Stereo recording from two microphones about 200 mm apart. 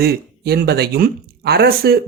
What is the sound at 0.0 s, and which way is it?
Speech, 50° right (ahead or behind).